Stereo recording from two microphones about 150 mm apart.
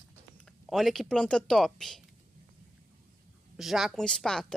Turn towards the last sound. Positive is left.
turn(degrees=5)  # may be behind; listen again after turning